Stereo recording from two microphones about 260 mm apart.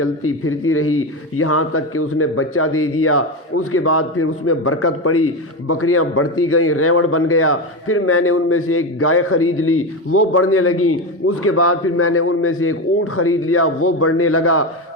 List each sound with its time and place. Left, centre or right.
0.0 s a man's voice: left